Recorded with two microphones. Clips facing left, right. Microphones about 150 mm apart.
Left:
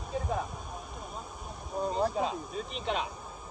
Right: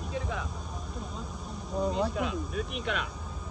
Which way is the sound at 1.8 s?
70° right (ahead or behind).